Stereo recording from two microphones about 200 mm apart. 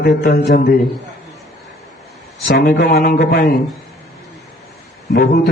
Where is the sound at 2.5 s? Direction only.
50° left (ahead or behind).